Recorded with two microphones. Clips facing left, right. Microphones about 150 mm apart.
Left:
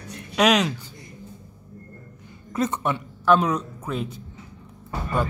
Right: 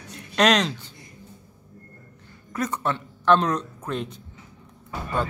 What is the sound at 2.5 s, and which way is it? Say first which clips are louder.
Speech: left 2 dB; 20° left (ahead or behind).